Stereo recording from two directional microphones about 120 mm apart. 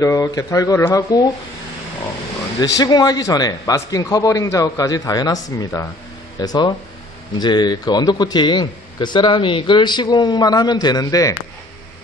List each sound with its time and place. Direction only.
0.0 s speech: 30° left (ahead or behind)
2.6 s a man's voice: 35° left (ahead or behind)